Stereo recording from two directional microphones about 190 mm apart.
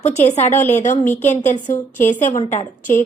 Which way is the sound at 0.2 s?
35° left (ahead or behind).